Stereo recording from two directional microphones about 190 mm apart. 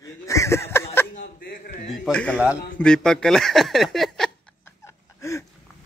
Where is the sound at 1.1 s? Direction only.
50° left (ahead or behind).